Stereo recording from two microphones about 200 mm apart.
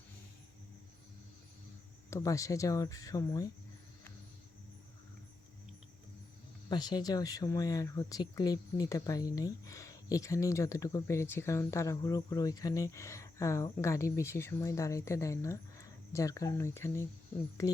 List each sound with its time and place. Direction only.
2.0 s speech: 15° left (ahead or behind)
6.7 s speech: 20° left (ahead or behind)